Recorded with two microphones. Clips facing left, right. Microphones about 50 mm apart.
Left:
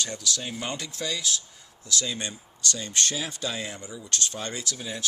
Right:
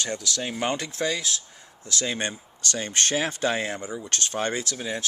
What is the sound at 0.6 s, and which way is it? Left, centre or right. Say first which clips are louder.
Speech: right 6 dB; right.